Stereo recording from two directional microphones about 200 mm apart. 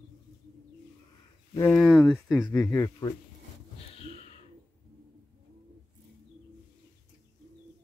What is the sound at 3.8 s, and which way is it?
Gasp, 30° left (ahead or behind).